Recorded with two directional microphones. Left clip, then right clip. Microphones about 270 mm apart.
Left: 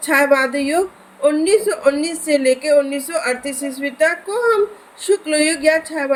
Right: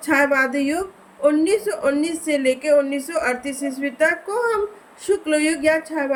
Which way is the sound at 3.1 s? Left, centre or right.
Right.